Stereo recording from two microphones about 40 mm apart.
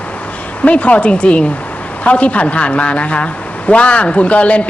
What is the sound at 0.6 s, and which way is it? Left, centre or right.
Speech, left.